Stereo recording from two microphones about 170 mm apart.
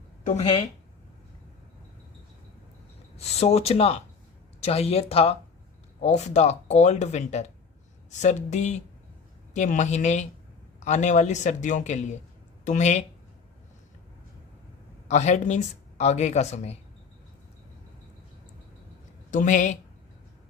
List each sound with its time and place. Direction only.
0.3 s speech: 35° left (ahead or behind)
3.2 s speech: 40° left (ahead or behind)
15.0 s speech: 40° left (ahead or behind)
19.3 s speech: 50° left (ahead or behind)